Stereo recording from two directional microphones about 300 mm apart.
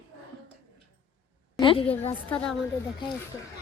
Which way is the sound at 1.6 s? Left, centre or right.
Centre.